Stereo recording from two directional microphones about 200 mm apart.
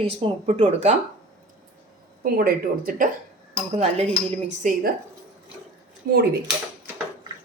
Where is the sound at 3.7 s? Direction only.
30° right (ahead or behind).